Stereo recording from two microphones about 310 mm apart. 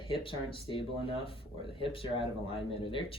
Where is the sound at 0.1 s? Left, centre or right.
Centre.